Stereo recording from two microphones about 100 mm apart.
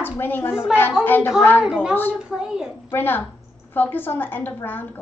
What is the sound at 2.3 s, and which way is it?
Speech, 5° right (ahead or behind).